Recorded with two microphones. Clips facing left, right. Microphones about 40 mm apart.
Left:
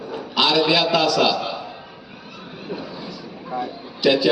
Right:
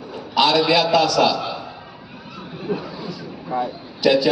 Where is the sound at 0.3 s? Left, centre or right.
Left.